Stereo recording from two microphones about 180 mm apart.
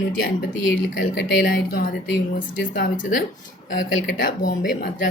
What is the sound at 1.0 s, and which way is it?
A woman's voice, 50° left (ahead or behind).